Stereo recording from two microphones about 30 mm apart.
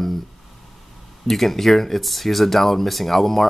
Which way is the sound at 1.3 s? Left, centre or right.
Centre.